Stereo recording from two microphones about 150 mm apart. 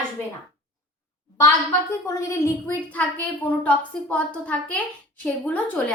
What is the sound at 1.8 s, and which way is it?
A woman's voice, 20° left (ahead or behind).